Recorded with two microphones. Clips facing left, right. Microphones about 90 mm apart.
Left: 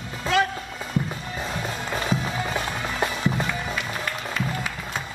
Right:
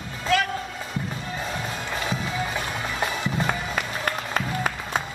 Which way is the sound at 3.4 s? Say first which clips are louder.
Right 2 dB; 45° right (ahead or behind).